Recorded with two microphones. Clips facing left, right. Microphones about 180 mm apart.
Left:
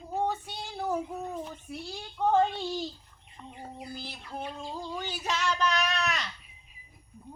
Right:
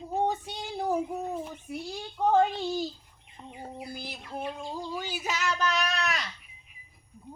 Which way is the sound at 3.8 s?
10° right (ahead or behind).